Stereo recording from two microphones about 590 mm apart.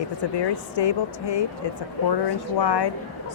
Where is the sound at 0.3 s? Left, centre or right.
Left.